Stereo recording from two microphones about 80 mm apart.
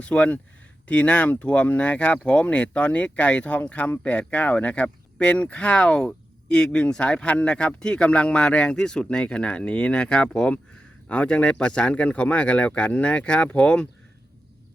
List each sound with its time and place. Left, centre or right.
0.0 s speech: centre